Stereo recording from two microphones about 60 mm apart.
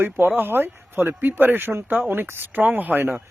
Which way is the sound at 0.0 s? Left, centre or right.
Right.